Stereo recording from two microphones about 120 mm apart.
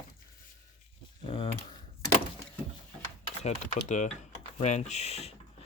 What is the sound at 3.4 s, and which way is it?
Speech, 85° left.